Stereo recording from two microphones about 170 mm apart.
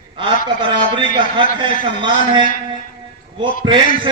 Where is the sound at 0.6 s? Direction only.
30° right (ahead or behind).